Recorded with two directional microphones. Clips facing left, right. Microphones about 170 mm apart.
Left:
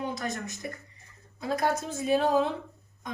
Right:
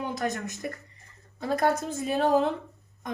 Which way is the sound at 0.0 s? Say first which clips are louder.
Right 3 dB; 55° right (ahead or behind).